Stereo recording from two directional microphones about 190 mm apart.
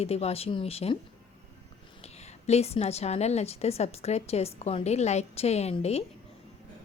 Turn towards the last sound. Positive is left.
turn(degrees=35)  # may be behind; listen again after turning